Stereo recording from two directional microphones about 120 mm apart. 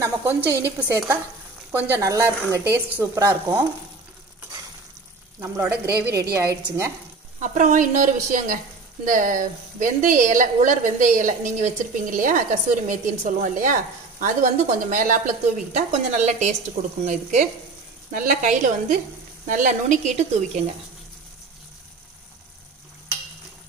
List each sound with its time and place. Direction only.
0.0 s a woman's voice: 15° right (ahead or behind)
5.4 s speech: 20° right (ahead or behind)
7.3 s a woman's voice: 90° right
15.9 s a woman's voice: 75° right (ahead or behind)
18.1 s a woman's voice: 90° right